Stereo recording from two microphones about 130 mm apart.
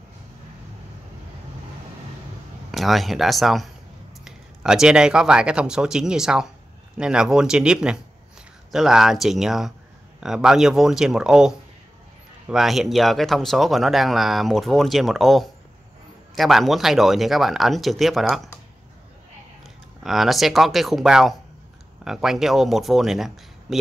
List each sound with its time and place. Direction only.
2.7 s speech: centre (ahead or behind)
20.0 s speech: centre (ahead or behind)